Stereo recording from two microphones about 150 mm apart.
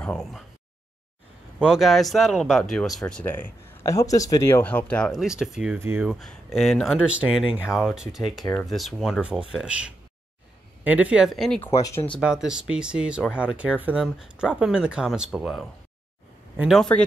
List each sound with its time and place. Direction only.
0.0 s speech: 5° left (ahead or behind)
1.6 s speech: centre (ahead or behind)
6.1 s speech: centre (ahead or behind)
11.6 s speech: 20° left (ahead or behind)
12.2 s speech: 5° right (ahead or behind)